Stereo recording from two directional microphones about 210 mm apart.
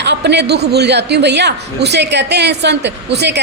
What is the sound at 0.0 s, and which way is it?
A man's voice, 55° right (ahead or behind).